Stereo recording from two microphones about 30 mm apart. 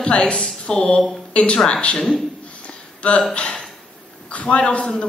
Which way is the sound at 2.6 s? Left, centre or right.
Left.